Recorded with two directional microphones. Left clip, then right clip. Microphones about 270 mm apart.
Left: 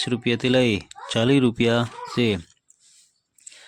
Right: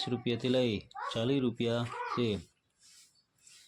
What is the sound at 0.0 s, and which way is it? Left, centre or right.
Speech, left.